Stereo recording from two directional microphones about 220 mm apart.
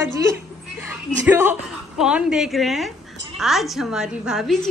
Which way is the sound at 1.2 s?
10° right (ahead or behind).